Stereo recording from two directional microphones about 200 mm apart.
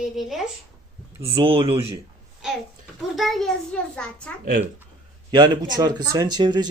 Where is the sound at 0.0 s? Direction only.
Centre (ahead or behind).